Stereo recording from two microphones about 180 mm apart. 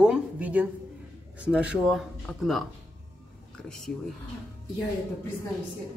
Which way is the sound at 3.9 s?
Centre (ahead or behind).